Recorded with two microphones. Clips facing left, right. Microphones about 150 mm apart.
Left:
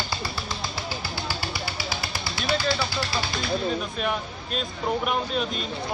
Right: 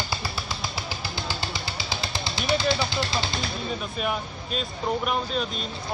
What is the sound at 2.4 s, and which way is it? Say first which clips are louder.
Speech: right 1 dB; 20° right (ahead or behind).